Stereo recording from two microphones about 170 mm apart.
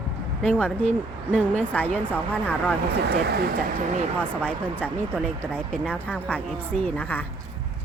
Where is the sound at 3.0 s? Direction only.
70° right (ahead or behind).